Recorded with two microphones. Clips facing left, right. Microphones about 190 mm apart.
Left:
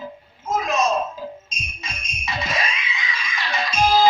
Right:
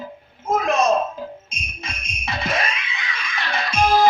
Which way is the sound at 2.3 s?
55° right (ahead or behind).